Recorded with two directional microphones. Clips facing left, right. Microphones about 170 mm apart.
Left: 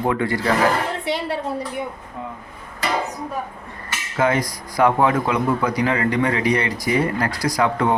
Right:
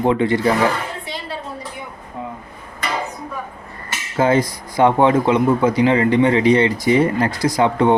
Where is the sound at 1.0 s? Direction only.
70° left (ahead or behind).